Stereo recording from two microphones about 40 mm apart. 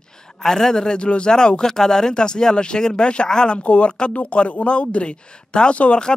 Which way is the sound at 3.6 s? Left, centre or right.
Left.